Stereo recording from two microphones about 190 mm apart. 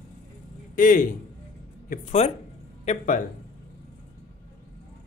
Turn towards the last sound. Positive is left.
turn(degrees=40)  # may be behind; listen again after turning